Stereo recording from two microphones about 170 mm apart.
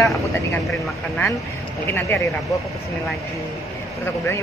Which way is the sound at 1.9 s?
15° left (ahead or behind).